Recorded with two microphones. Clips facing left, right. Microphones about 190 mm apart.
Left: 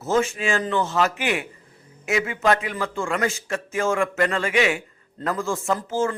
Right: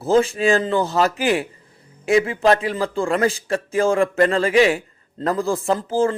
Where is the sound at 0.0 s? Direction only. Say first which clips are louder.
Right 5 dB; 35° right (ahead or behind).